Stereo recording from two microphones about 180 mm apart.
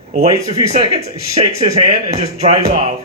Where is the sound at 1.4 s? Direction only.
35° right (ahead or behind).